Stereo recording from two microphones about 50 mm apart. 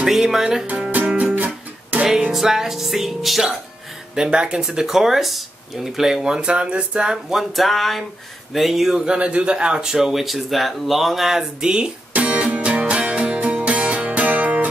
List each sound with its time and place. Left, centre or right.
0.0 s speech: centre
0.9 s music: right
2.3 s music: centre
4.1 s speech: centre
4.6 s speech: centre
7.3 s music: centre
9.0 s speech: right
12.1 s music: right